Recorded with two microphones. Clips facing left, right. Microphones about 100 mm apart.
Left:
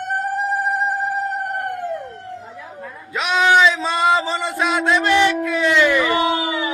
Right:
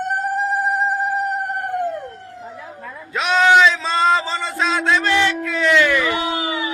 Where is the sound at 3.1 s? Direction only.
Centre (ahead or behind).